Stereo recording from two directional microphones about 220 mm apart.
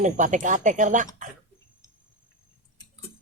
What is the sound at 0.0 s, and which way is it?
Speech, 35° right (ahead or behind).